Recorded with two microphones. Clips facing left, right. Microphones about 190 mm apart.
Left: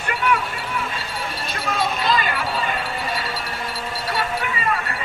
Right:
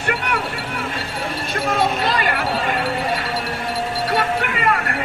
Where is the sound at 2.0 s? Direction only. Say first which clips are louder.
Right 2 dB; 65° right (ahead or behind).